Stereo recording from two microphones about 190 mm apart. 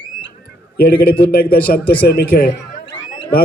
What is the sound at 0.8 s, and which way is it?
A man's voice, 55° left (ahead or behind).